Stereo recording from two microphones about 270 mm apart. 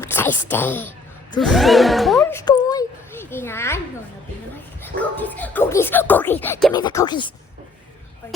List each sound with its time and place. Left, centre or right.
0.0 s speech: centre
4.9 s speech: centre